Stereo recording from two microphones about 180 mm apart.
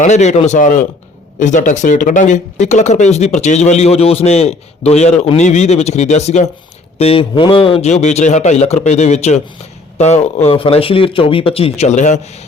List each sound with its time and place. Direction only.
0.0 s speech: 40° left (ahead or behind)